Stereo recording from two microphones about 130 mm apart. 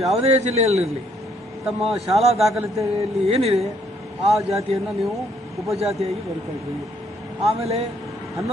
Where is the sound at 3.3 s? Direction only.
55° right (ahead or behind).